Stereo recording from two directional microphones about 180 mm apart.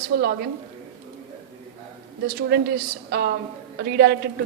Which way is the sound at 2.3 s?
60° right (ahead or behind).